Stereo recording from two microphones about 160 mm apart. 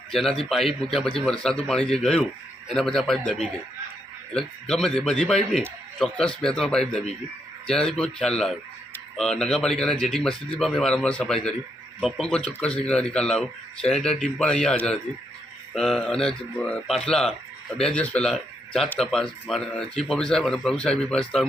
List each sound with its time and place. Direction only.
0.1 s speech: centre (ahead or behind)
4.7 s speech: centre (ahead or behind)